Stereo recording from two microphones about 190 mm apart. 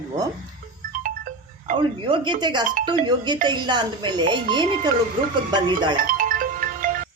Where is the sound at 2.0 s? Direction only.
25° right (ahead or behind).